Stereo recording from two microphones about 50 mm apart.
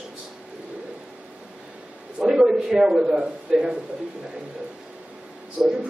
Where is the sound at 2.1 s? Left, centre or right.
Centre.